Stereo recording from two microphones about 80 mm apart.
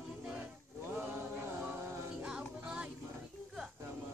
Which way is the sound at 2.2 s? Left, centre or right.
Centre.